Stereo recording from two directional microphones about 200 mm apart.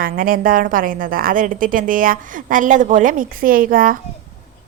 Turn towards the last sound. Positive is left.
turn(degrees=-45)  # may be behind; listen again after turning